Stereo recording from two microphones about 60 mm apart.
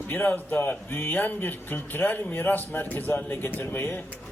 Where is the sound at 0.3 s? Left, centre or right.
Left.